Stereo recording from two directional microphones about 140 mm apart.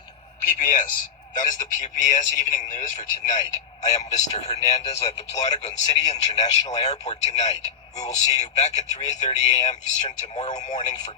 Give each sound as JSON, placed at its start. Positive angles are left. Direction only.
{"t": 0.5, "sound": "a man's voice", "side_deg": 65}